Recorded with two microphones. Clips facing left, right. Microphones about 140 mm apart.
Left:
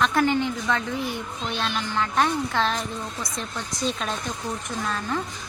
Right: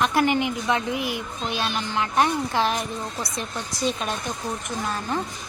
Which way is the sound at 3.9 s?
5° right (ahead or behind).